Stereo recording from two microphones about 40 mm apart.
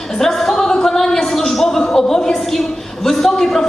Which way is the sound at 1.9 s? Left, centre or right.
Centre.